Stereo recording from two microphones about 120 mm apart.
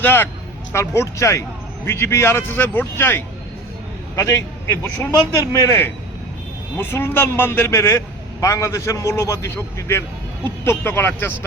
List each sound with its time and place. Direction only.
0.0 s a man's voice: 15° left (ahead or behind)